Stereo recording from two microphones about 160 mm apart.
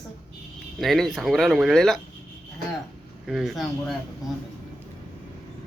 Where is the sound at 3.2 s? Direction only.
Centre (ahead or behind).